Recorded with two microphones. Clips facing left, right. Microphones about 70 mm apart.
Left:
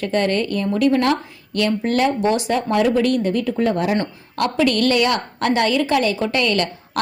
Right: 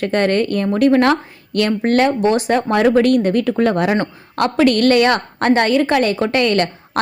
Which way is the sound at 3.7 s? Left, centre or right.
Right.